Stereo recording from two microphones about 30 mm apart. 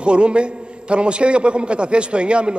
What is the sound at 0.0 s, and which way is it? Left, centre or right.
A man's voice, right.